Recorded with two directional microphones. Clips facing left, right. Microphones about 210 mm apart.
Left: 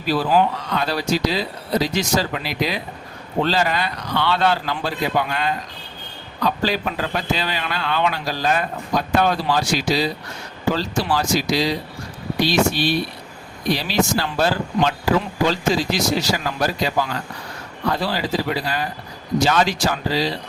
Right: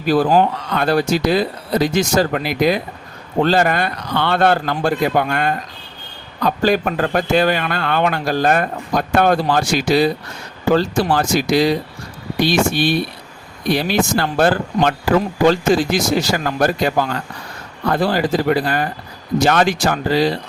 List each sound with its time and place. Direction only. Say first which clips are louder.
0.0 s a man's voice: right 4 dB; 50° right (ahead or behind)